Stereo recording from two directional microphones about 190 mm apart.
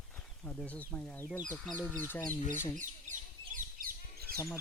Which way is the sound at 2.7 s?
40° right (ahead or behind).